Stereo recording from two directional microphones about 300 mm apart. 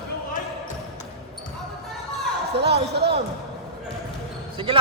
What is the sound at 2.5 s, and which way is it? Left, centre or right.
Speech, right.